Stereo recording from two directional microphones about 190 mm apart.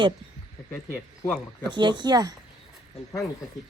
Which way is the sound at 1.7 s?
25° right (ahead or behind).